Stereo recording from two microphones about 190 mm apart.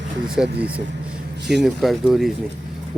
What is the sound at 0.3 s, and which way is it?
Speech, 5° right (ahead or behind).